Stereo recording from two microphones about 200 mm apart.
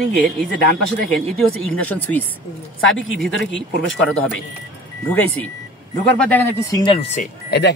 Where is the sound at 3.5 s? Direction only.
70° left (ahead or behind).